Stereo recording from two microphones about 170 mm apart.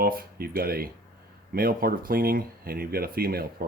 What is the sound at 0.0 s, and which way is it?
Speech, 60° right (ahead or behind).